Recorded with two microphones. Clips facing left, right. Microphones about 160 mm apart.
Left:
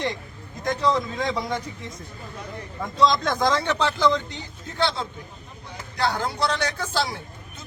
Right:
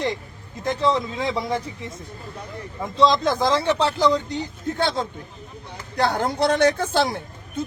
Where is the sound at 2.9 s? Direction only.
25° right (ahead or behind).